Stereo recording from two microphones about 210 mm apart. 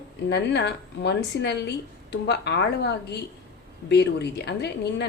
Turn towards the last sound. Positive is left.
turn(degrees=55)  # may be behind; listen again after turning